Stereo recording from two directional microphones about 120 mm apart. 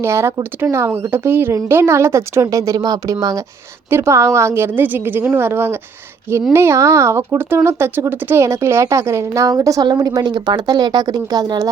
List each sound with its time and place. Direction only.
0.0 s speech: 20° right (ahead or behind)